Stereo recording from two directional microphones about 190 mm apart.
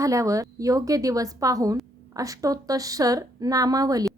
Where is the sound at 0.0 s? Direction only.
15° right (ahead or behind).